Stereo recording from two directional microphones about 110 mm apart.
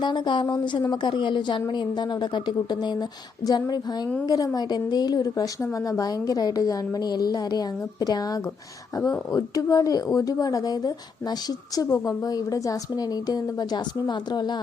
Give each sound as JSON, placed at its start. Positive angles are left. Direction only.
{"t": 0.0, "sound": "a woman's voice", "side_deg": 45}